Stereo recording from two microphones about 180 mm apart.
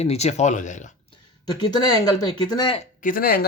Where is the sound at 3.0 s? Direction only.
50° left (ahead or behind).